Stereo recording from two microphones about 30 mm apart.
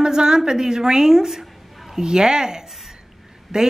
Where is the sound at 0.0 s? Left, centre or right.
Right.